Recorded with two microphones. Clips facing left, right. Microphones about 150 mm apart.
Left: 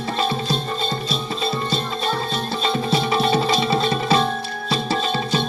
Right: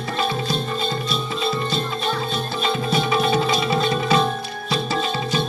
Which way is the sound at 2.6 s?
35° left (ahead or behind).